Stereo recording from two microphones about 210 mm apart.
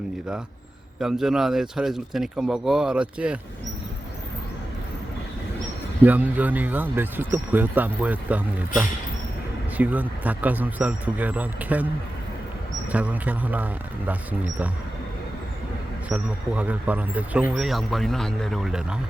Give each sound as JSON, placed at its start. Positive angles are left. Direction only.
{"t": 0.9, "sound": "speech", "side_deg": 0}
{"t": 6.1, "sound": "speech", "side_deg": -10}
{"t": 12.9, "sound": "speech", "side_deg": -5}
{"t": 16.0, "sound": "speech", "side_deg": -5}